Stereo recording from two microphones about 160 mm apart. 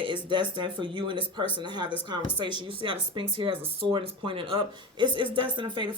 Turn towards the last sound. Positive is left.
turn(degrees=-30)  # may be behind; listen again after turning